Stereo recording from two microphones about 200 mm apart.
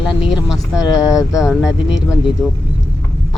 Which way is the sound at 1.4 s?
5° right (ahead or behind).